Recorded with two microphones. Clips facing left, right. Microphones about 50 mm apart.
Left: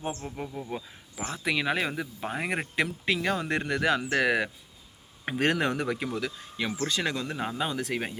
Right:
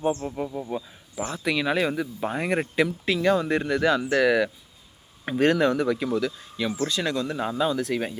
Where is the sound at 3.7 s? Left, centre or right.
Left.